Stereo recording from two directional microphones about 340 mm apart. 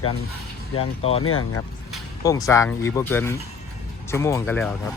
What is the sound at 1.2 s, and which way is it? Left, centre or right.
Speech, left.